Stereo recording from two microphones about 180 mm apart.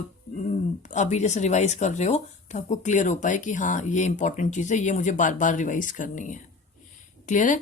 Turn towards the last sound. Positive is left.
turn(degrees=45)  # may be behind; listen again after turning